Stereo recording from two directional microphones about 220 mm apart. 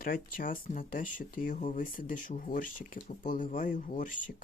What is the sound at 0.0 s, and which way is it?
Speech, 40° left (ahead or behind).